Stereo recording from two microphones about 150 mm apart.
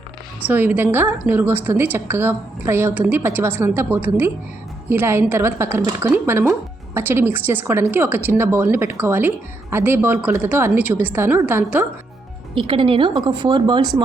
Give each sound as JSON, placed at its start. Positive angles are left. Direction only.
{"t": 0.4, "sound": "a woman's voice", "side_deg": -10}
{"t": 12.5, "sound": "a woman's voice", "side_deg": -35}